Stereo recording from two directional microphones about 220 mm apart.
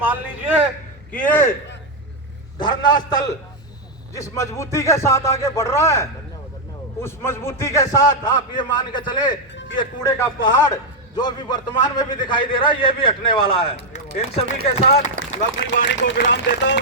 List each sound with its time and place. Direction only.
0.0 s a man's voice: 10° right (ahead or behind)
1.1 s a man's voice: 10° left (ahead or behind)
2.6 s a man's voice: 20° left (ahead or behind)
15.8 s speech: 50° left (ahead or behind)